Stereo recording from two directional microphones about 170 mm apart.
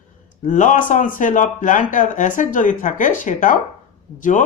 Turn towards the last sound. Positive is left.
turn(degrees=50)  # may be behind; listen again after turning